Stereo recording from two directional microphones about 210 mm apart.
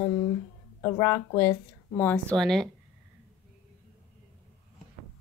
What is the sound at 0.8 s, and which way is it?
Speech, 10° left (ahead or behind).